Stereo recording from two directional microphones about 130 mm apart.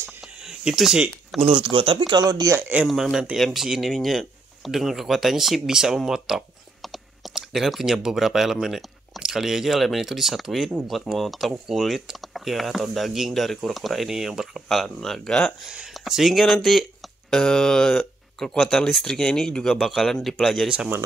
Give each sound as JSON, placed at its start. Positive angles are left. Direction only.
{"t": 0.2, "sound": "a sound", "side_deg": -5}
{"t": 1.4, "sound": "speech", "side_deg": -40}
{"t": 2.9, "sound": "speech", "side_deg": 0}